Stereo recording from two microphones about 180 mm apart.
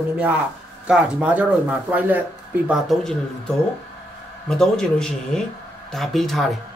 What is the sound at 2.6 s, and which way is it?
Speech, centre (ahead or behind).